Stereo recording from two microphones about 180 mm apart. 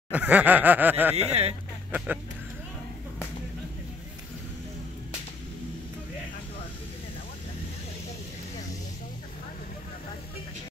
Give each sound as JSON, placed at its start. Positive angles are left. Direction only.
{"t": 0.1, "sound": "snicker", "side_deg": -10}
{"t": 1.1, "sound": "speech", "side_deg": -35}
{"t": 1.9, "sound": "speech", "side_deg": -10}